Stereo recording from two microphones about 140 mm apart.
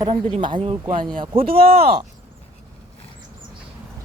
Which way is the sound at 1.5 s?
90° right.